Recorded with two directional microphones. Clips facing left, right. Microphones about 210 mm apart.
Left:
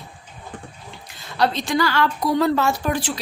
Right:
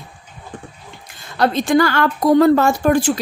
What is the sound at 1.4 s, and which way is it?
A woman's voice, 50° right (ahead or behind).